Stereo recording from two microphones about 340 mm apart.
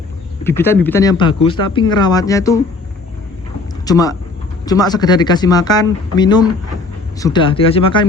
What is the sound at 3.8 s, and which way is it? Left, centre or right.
Speech, centre.